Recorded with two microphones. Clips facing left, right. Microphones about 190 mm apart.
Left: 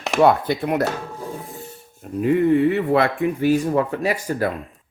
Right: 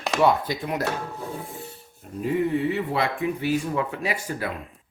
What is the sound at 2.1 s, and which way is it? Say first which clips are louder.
Speech: left 7 dB; 65° left (ahead or behind).